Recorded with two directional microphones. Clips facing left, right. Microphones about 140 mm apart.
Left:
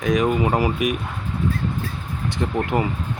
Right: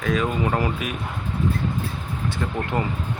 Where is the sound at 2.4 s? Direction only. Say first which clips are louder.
Left 7 dB; 20° left (ahead or behind).